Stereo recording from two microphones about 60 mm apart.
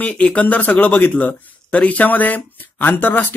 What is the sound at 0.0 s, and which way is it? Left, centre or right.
Speech, left.